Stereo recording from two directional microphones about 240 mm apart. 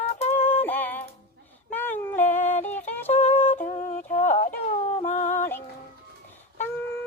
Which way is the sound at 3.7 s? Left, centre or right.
Left.